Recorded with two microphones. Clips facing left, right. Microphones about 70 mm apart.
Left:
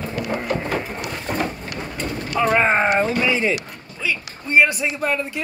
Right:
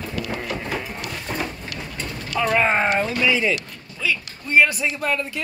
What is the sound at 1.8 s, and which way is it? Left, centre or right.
Mechanisms, left.